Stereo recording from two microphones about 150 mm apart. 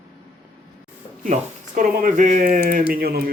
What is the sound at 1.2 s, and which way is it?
Speech, 60° right (ahead or behind).